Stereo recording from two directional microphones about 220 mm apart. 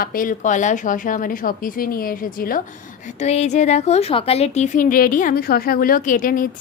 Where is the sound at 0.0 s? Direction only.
40° left (ahead or behind).